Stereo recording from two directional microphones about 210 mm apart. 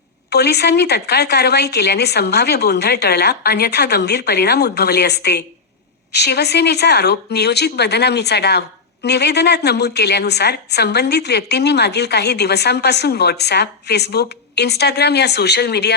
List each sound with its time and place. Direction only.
0.3 s a woman's voice: 50° left (ahead or behind)